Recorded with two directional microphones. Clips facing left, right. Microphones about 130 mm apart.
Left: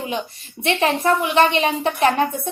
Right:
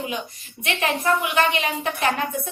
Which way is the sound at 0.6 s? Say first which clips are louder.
Left 5 dB; 35° left (ahead or behind).